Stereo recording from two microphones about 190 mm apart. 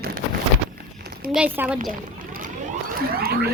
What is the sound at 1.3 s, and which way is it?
Speech, 5° right (ahead or behind).